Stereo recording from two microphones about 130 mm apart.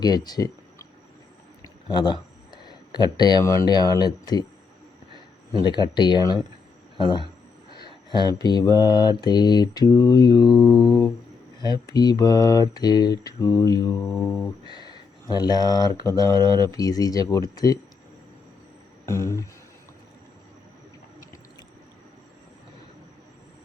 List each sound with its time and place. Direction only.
0.0 s speech: 30° left (ahead or behind)
1.6 s a sound: 35° left (ahead or behind)
2.6 s mantra: 35° left (ahead or behind)
5.6 s mantra: 35° left (ahead or behind)
14.3 s mantra: 5° left (ahead or behind)
14.7 s a sound: 40° right (ahead or behind)
15.3 s mantra: 30° left (ahead or behind)
19.0 s mantra: 20° left (ahead or behind)